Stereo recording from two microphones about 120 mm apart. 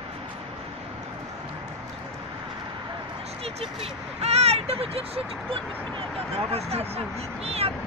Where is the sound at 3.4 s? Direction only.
55° right (ahead or behind).